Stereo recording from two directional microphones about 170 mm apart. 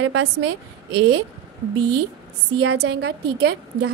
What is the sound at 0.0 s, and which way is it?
Speech, 90° right.